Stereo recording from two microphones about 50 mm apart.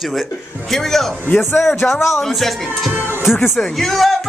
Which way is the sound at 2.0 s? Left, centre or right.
Left.